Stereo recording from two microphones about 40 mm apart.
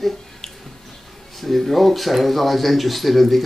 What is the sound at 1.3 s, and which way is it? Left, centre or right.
Speech, centre.